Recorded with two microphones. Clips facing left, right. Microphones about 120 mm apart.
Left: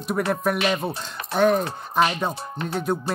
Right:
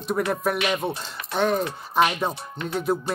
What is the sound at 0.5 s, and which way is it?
Speech, 35° left (ahead or behind).